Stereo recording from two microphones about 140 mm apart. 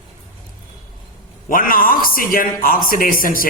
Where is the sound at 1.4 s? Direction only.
85° left.